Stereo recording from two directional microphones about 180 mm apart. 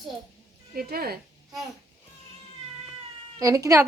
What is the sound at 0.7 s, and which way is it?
Speech, 60° right (ahead or behind).